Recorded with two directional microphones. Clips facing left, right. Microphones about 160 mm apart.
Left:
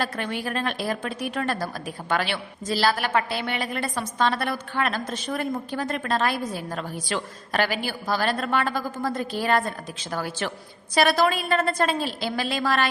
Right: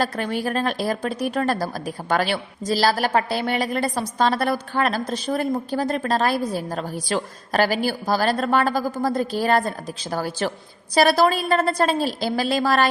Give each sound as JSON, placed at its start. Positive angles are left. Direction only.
{"t": 0.0, "sound": "a woman's voice", "side_deg": -40}